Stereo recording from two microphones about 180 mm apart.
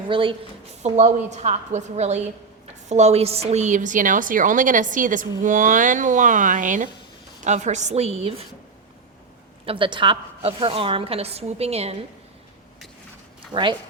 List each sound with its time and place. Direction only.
0.1 s a woman's voice: 30° right (ahead or behind)
9.6 s a woman's voice: 30° right (ahead or behind)
13.5 s speech: 25° right (ahead or behind)